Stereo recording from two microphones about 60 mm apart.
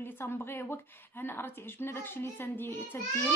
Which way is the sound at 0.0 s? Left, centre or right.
Left.